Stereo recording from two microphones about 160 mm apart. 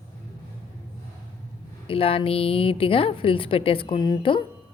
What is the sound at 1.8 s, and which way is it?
A woman's voice, 35° left (ahead or behind).